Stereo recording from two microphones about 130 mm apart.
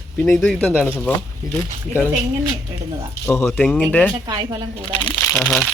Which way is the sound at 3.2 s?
20° left (ahead or behind).